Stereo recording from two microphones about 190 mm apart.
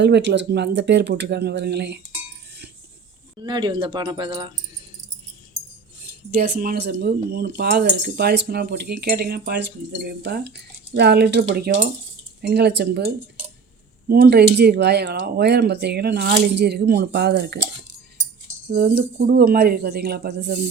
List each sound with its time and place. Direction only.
0.0 s speech: 65° right (ahead or behind)
3.3 s speech: 25° right (ahead or behind)
6.1 s speech: 55° right (ahead or behind)
18.8 s speech: 60° right (ahead or behind)